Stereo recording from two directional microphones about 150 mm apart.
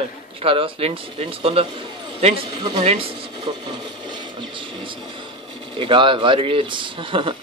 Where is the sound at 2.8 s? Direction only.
40° right (ahead or behind).